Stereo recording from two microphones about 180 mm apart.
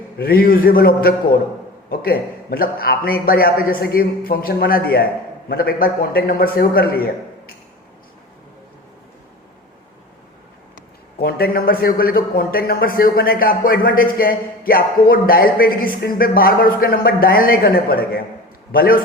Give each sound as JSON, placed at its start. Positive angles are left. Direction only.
{"t": 0.2, "sound": "a man's voice", "side_deg": 55}
{"t": 11.2, "sound": "a man's voice", "side_deg": 60}